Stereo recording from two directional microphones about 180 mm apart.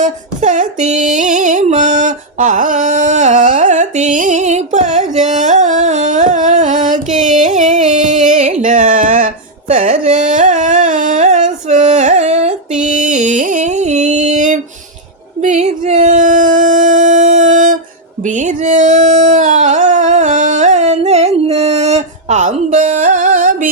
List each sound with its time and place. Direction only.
0.0 s music: 45° right (ahead or behind)
9.7 s carnatic music: 45° right (ahead or behind)
12.8 s a sound: 45° right (ahead or behind)